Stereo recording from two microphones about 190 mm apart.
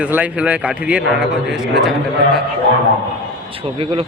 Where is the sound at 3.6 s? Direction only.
30° right (ahead or behind).